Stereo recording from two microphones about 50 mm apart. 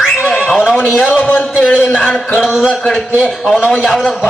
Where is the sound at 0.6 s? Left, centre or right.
Centre.